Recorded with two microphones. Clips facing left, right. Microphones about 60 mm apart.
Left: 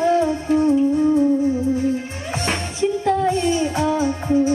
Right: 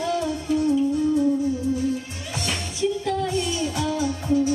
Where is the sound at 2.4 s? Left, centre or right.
Left.